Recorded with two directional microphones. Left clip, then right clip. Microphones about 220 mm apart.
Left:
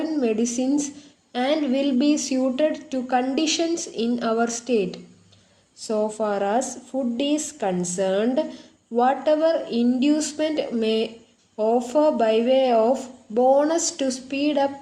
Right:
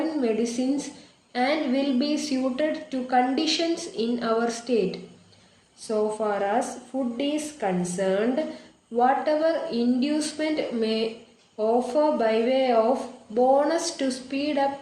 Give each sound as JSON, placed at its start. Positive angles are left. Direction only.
{"t": 0.2, "sound": "speech", "side_deg": 50}